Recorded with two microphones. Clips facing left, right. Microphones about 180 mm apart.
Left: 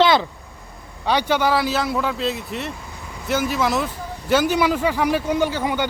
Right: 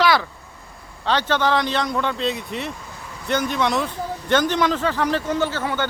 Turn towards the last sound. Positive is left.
turn(degrees=15)  # may be behind; listen again after turning